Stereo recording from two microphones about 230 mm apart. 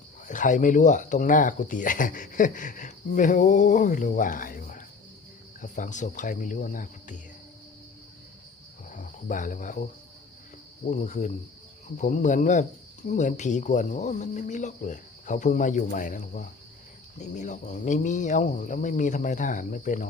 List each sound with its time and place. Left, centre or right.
0.3 s speech: left
8.9 s speech: left